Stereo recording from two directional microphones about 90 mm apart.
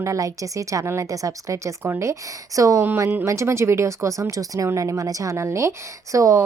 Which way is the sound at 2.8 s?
25° right (ahead or behind).